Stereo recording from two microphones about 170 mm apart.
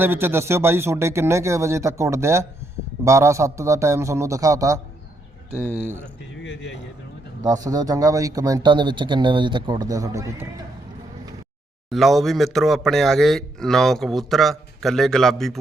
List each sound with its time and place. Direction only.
0.0 s speech: 15° right (ahead or behind)
6.4 s a sound: 90° left
7.4 s speech: 20° right (ahead or behind)
11.9 s speech: centre (ahead or behind)